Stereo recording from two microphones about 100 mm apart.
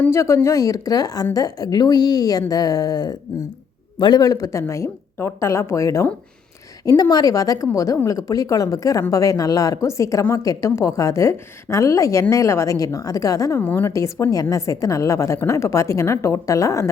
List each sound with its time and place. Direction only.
0.1 s a woman's voice: 30° left (ahead or behind)
13.6 s speech: 20° left (ahead or behind)
13.9 s a woman's voice: 35° left (ahead or behind)